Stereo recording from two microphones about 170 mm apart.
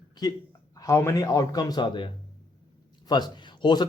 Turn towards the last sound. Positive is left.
turn(degrees=25)  # may be behind; listen again after turning